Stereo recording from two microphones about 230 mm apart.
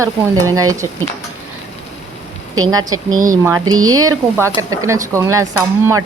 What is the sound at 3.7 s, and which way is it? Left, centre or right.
Speech, right.